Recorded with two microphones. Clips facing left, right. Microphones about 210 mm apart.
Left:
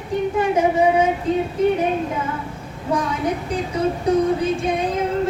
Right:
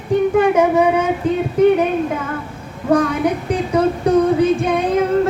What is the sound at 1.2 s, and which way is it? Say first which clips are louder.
Speech: right 2 dB; 65° right (ahead or behind).